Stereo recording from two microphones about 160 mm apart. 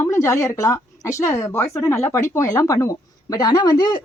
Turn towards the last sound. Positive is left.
turn(degrees=30)  # may be behind; listen again after turning